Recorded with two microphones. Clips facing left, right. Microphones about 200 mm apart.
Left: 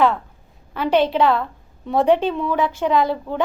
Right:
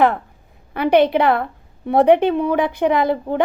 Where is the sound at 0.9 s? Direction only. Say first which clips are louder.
Right 2 dB; 60° right (ahead or behind).